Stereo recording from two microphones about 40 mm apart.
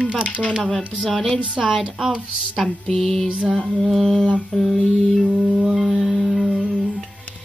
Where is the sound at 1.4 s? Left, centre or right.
Right.